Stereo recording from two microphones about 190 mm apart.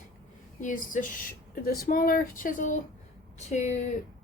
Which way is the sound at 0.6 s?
40° left (ahead or behind).